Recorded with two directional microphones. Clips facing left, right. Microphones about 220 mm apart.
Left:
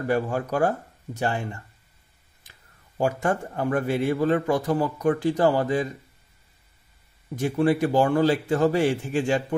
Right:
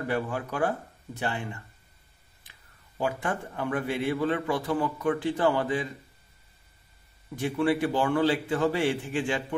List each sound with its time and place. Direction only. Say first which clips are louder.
0.1 s a man's voice: left 7 dB; 45° left (ahead or behind)
3.0 s a man's voice: left 6 dB; 45° left (ahead or behind)
7.3 s a man's voice: left 4 dB; 40° left (ahead or behind)